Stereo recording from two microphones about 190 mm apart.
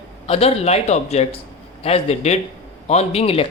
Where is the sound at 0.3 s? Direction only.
35° left (ahead or behind).